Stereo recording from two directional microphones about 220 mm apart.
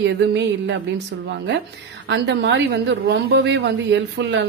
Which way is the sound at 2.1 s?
50° right (ahead or behind).